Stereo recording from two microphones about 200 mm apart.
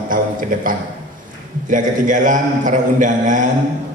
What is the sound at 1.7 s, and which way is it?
Mantra, 40° right (ahead or behind).